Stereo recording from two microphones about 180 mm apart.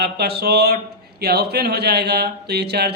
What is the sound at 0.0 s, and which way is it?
Speech, 65° right (ahead or behind).